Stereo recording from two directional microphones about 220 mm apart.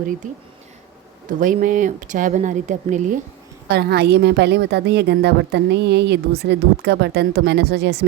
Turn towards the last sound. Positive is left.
turn(degrees=-50)  # may be behind; listen again after turning